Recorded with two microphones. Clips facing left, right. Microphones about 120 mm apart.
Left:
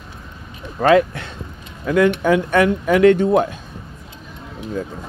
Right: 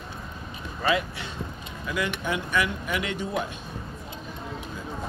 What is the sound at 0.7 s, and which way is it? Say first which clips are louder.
Speech: left 12 dB; 55° left (ahead or behind).